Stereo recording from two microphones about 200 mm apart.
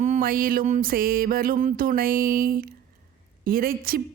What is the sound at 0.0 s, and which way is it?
A woman's voice, 40° right (ahead or behind).